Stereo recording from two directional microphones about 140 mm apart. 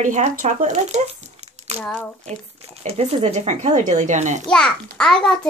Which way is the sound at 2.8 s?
50° right (ahead or behind).